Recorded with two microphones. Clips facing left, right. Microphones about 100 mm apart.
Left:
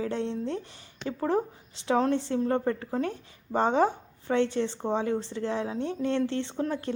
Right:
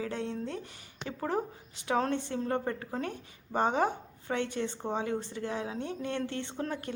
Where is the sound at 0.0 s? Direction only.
30° left (ahead or behind).